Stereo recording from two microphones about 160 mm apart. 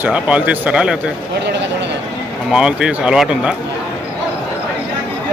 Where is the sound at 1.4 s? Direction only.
90° right.